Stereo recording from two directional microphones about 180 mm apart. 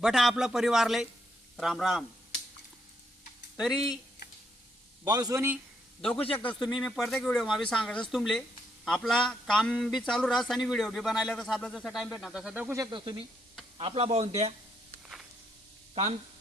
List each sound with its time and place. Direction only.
0.0 s speech: centre (ahead or behind)
3.6 s speech: centre (ahead or behind)
5.0 s a man's voice: 20° right (ahead or behind)
6.0 s a man's voice: 5° left (ahead or behind)
12.8 s a man's voice: 25° right (ahead or behind)